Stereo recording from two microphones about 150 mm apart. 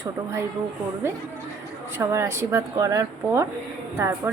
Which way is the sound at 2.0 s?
20° right (ahead or behind).